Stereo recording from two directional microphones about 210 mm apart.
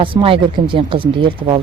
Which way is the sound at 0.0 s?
25° right (ahead or behind).